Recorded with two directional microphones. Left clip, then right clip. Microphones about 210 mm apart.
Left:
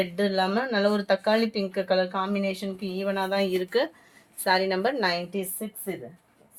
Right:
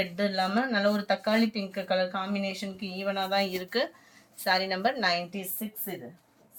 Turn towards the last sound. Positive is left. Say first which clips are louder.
# left 5 dB
turn(degrees=55)  # may be behind; listen again after turning